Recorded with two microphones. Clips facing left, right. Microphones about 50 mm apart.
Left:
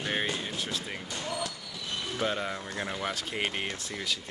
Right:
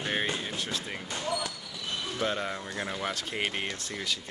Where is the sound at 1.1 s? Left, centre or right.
Right.